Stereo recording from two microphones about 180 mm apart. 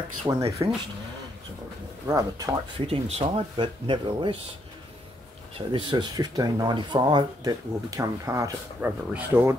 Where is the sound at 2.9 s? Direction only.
30° right (ahead or behind).